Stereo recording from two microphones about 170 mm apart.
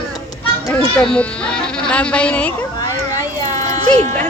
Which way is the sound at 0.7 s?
5° left (ahead or behind).